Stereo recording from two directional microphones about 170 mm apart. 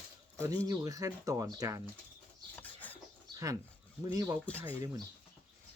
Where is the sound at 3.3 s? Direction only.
20° right (ahead or behind).